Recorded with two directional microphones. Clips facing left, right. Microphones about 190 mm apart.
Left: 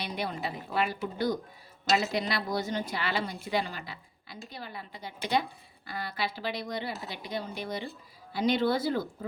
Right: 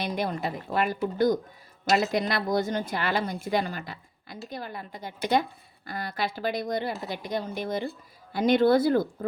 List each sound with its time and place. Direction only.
0.0 s a woman's voice: 45° right (ahead or behind)